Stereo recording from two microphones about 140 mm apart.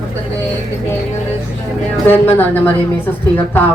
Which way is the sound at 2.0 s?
15° left (ahead or behind).